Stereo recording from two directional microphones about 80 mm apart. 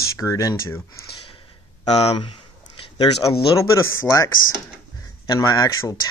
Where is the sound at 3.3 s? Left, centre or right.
Left.